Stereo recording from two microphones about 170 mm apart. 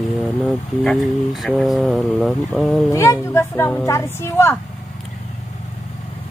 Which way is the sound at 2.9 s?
20° left (ahead or behind).